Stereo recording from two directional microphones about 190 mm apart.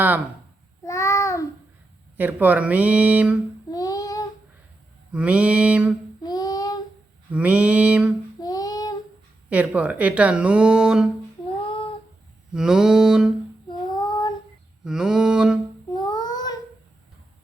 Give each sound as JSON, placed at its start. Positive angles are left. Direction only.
{"t": 0.9, "sound": "babbling", "side_deg": 15}
{"t": 2.1, "sound": "speech", "side_deg": -10}
{"t": 3.7, "sound": "child singing", "side_deg": 20}
{"t": 5.1, "sound": "speech", "side_deg": -5}
{"t": 6.2, "sound": "child singing", "side_deg": 20}
{"t": 7.3, "sound": "speech", "side_deg": -5}
{"t": 8.4, "sound": "child singing", "side_deg": 20}
{"t": 9.5, "sound": "speech", "side_deg": -5}
{"t": 12.5, "sound": "mantra", "side_deg": -5}
{"t": 13.7, "sound": "female singing", "side_deg": 25}
{"t": 14.8, "sound": "a sound", "side_deg": -5}
{"t": 15.9, "sound": "child singing", "side_deg": 20}